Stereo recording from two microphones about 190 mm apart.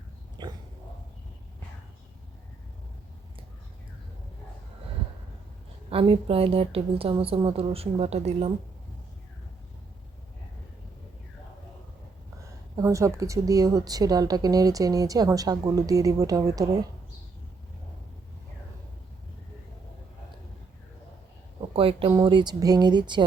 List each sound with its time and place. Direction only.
0.4 s dog: 20° right (ahead or behind)
5.9 s a woman's voice: 30° right (ahead or behind)
12.4 s a woman's voice: 15° right (ahead or behind)
21.6 s a sound: 30° right (ahead or behind)
22.1 s a woman's voice: 25° right (ahead or behind)